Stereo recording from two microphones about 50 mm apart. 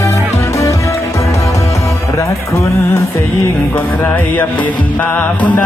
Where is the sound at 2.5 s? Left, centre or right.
Left.